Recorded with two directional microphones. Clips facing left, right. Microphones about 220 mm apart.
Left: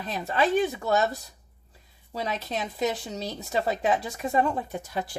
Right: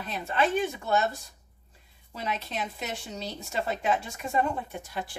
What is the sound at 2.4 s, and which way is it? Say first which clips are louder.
A woman's voice: left 7 dB; 40° left (ahead or behind).